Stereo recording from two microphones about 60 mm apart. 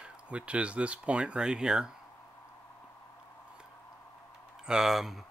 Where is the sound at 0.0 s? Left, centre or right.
Centre.